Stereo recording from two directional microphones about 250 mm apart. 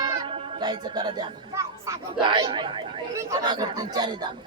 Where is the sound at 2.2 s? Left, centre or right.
Centre.